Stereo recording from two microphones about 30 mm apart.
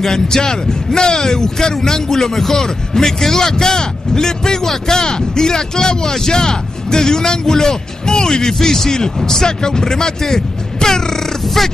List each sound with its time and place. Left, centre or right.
0.0 s a man's voice: centre
8.5 s a man's voice: centre